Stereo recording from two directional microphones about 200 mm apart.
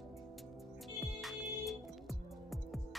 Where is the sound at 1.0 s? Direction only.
Centre (ahead or behind).